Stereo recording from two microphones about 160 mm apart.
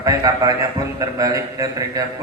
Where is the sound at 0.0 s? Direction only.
20° right (ahead or behind).